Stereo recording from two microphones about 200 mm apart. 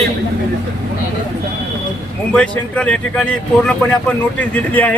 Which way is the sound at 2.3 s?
5° left (ahead or behind).